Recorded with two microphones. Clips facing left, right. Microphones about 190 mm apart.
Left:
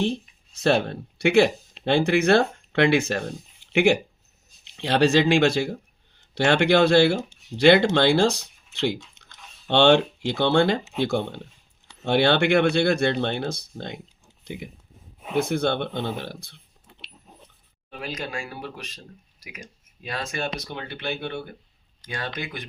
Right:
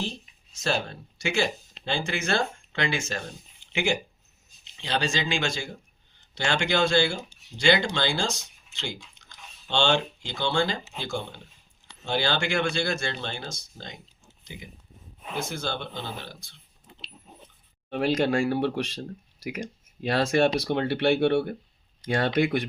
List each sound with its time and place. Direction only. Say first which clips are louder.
0.6 s speech: left 7 dB; 60° left (ahead or behind)
17.2 s a sound: even; centre (ahead or behind)
17.9 s speech: right 9 dB; 70° right (ahead or behind)
20.0 s speech: right 9 dB; 75° right (ahead or behind)